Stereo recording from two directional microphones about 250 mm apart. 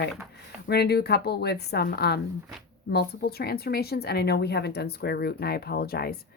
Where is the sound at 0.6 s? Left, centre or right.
Left.